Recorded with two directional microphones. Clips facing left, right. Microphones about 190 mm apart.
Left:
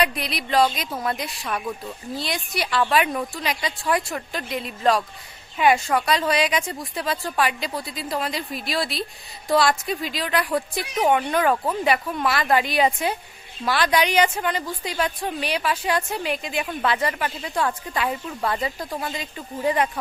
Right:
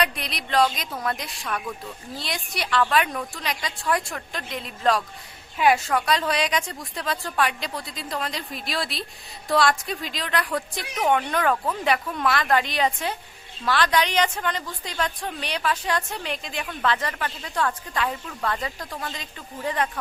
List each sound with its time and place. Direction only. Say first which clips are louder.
0.0 s a woman's voice: left 3 dB; 5° left (ahead or behind)
11.5 s speech: left 2 dB; 20° left (ahead or behind)
11.9 s speech: even; 5° left (ahead or behind)